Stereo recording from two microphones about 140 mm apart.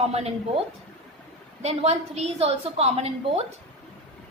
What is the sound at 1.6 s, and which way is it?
A woman's voice, 50° right (ahead or behind).